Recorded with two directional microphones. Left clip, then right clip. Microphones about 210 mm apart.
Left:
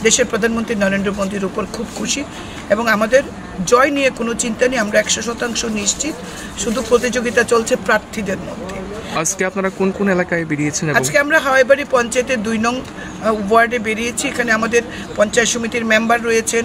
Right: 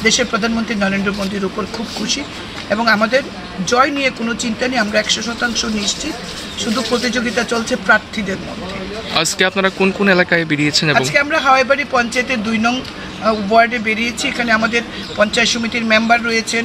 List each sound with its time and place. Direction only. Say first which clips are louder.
0.0 s speech: even; 20° left (ahead or behind)
2.7 s speech: even; 20° left (ahead or behind)
9.1 s speech: right 4 dB; centre (ahead or behind)
11.0 s speech: left 1 dB; 20° left (ahead or behind)